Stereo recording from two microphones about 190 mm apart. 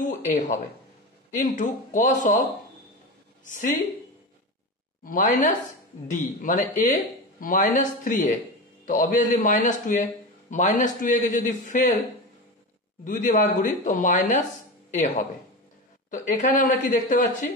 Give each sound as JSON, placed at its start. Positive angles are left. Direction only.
{"t": 0.3, "sound": "a man's voice", "side_deg": 40}
{"t": 3.4, "sound": "a man's voice", "side_deg": 40}
{"t": 5.0, "sound": "a man's voice", "side_deg": 45}
{"t": 13.0, "sound": "speech", "side_deg": 45}